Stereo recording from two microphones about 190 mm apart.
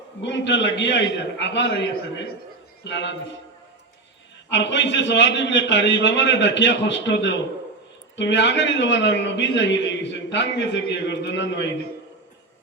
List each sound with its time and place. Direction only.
0.2 s a man's voice: 70° left (ahead or behind)
4.4 s a man's voice: 70° left (ahead or behind)